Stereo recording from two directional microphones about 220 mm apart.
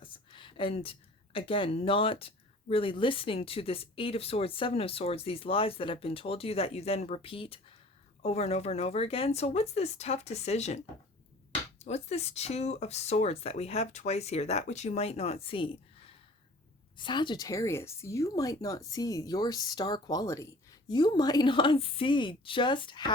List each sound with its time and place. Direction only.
0.0 s speech: 20° left (ahead or behind)
11.8 s speech: 30° left (ahead or behind)